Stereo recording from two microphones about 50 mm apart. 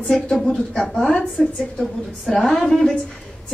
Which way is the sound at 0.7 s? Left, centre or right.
Centre.